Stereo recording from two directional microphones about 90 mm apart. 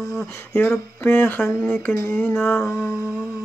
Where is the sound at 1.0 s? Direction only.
25° left (ahead or behind).